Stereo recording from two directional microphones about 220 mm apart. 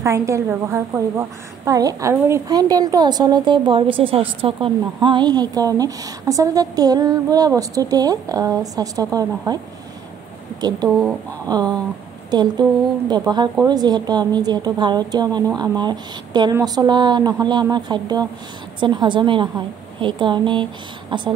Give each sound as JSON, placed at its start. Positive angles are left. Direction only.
{"t": 0.0, "sound": "a woman's voice", "side_deg": -15}
{"t": 11.4, "sound": "a woman's voice", "side_deg": -15}